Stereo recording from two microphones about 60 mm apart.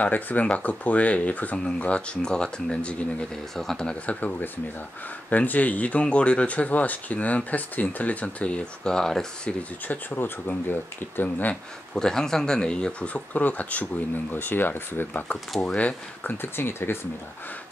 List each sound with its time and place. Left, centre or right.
0.0 s speech: left; by 3.9 s centre
4.0 s speech: left
9.8 s speech: left
11.9 s speech: centre
13.1 s speech: left
15.7 s speech: centre
16.3 s speech: left